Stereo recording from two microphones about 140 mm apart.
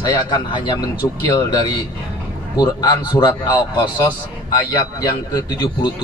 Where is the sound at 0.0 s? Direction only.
30° left (ahead or behind).